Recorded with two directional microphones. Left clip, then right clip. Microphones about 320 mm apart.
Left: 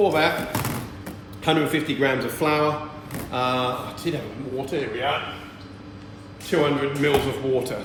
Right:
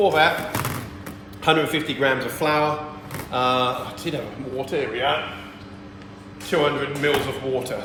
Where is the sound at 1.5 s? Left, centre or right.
Centre.